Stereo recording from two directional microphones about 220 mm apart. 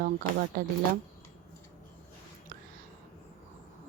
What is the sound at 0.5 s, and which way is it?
Speech, 40° right (ahead or behind).